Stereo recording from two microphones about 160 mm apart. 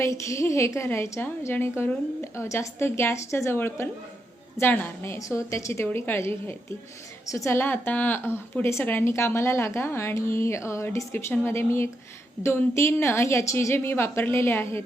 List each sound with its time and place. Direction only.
0.0 s a woman's voice: 20° left (ahead or behind)